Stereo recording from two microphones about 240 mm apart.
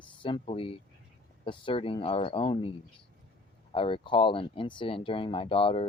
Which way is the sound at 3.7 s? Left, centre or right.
Left.